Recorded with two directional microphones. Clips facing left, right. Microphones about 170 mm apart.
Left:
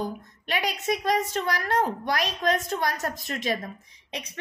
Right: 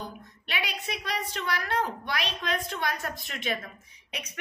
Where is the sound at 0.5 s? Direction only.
45° left (ahead or behind).